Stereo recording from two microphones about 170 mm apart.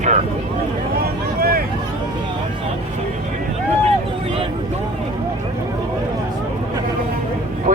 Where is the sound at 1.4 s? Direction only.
60° right (ahead or behind).